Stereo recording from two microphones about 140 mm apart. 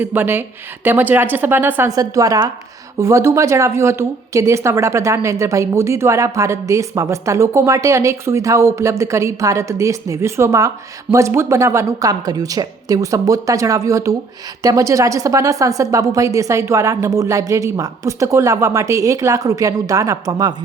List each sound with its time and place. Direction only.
0.0 s speech: 15° right (ahead or behind)
1.9 s speech: 25° right (ahead or behind)